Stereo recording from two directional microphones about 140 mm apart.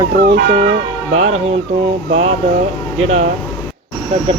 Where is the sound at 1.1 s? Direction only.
50° right (ahead or behind).